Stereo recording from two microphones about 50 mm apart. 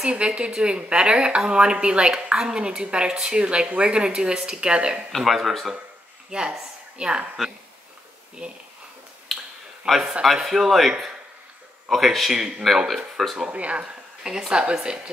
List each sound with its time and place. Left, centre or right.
0.0 s speech: right
5.1 s speech: centre
6.3 s speech: centre
8.4 s speech: right
9.3 s finger snapping: centre
9.8 s speech: centre
11.9 s speech: centre
13.5 s a woman's voice: right